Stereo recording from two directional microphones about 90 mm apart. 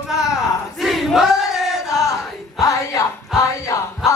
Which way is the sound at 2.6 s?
35° left (ahead or behind).